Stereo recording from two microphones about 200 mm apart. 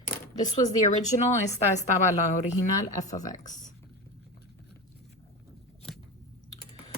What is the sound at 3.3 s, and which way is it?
Speech, 40° left (ahead or behind).